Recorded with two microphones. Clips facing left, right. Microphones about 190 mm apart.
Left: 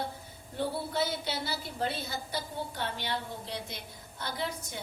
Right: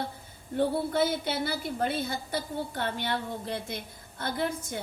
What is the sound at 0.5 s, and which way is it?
A woman's voice, 50° right (ahead or behind).